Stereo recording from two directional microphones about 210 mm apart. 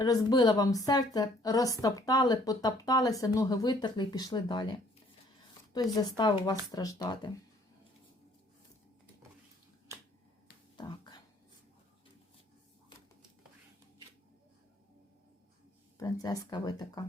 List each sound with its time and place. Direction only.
0.0 s speech: 20° left (ahead or behind)
6.0 s speech: 20° left (ahead or behind)
10.8 s whispering: 20° left (ahead or behind)
16.0 s speech: 15° left (ahead or behind)